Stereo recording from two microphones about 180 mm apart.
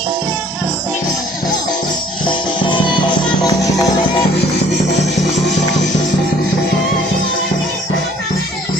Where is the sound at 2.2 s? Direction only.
25° left (ahead or behind).